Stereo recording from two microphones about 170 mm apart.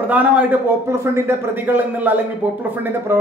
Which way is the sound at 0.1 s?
10° right (ahead or behind).